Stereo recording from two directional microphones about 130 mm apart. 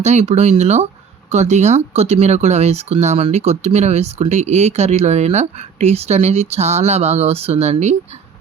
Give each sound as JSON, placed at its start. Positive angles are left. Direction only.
{"t": 0.0, "sound": "speech", "side_deg": -60}